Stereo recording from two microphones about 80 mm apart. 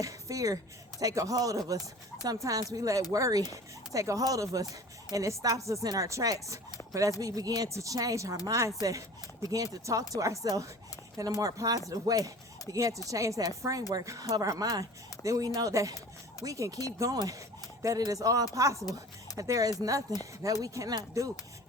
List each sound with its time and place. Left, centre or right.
0.0 s speech: right
10.4 s speech: right
11.3 s speech: right